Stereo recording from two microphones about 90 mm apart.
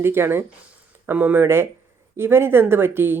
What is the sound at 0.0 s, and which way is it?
Speech, 25° right (ahead or behind).